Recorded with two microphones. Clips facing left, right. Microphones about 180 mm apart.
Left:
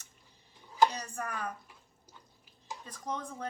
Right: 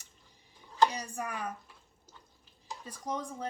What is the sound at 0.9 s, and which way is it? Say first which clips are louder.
Speech: right 1 dB; 10° right (ahead or behind).